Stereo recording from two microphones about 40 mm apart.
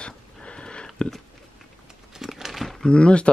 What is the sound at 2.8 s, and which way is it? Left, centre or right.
Speech, left.